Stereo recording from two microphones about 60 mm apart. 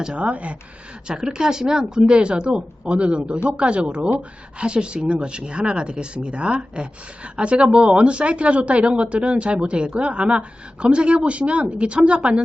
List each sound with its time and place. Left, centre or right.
0.0 s a woman's voice: centre